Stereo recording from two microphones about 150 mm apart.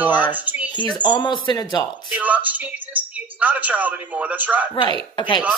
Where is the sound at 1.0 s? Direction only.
30° left (ahead or behind).